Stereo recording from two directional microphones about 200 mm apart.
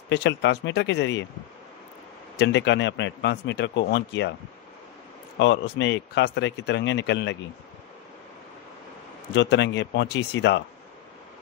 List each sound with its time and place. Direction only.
0.1 s a man's voice: 60° left (ahead or behind)
2.3 s a man's voice: 60° left (ahead or behind)
5.4 s a man's voice: 60° left (ahead or behind)
9.3 s a man's voice: 60° left (ahead or behind)